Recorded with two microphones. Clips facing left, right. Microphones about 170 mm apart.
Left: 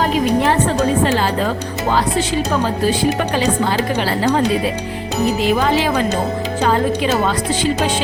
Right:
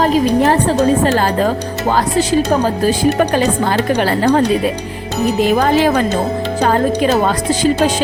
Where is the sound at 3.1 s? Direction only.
45° right (ahead or behind).